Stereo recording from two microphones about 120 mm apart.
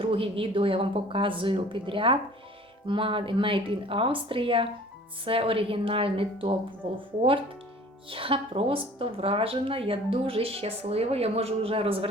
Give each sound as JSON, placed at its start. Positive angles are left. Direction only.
{"t": 0.0, "sound": "speech", "side_deg": -50}
{"t": 8.1, "sound": "speech", "side_deg": -50}